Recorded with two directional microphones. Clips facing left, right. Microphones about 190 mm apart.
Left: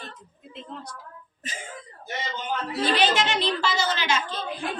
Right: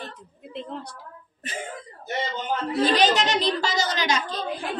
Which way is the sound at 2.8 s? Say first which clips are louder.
Right 2 dB; 40° right (ahead or behind).